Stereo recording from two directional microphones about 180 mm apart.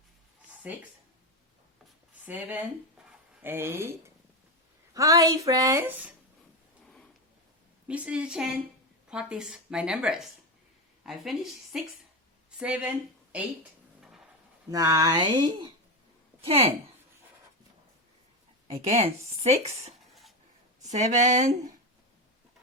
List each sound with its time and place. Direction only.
0.7 s speech: 10° right (ahead or behind)
2.2 s a woman's voice: 10° right (ahead or behind)
7.9 s speech: 5° right (ahead or behind)
14.0 s a sound: centre (ahead or behind)
14.7 s a woman's voice: 20° right (ahead or behind)
18.7 s speech: 35° right (ahead or behind)